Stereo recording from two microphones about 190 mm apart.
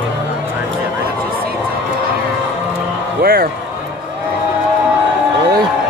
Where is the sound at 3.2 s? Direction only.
50° right (ahead or behind).